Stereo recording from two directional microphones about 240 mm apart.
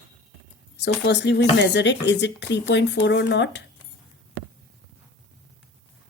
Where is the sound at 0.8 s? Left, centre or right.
Left.